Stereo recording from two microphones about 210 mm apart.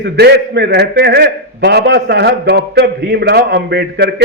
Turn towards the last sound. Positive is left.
turn(degrees=-50)  # may be behind; listen again after turning